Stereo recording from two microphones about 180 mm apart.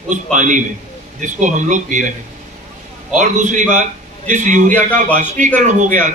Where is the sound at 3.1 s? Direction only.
45° right (ahead or behind).